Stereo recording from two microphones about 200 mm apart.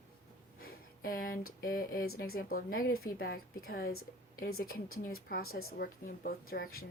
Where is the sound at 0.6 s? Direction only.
50° left (ahead or behind).